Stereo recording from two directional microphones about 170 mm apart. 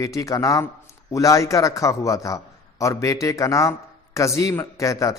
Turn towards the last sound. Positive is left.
turn(degrees=20)  # may be behind; listen again after turning